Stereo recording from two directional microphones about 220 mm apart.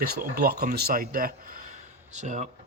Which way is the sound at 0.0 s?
45° right (ahead or behind).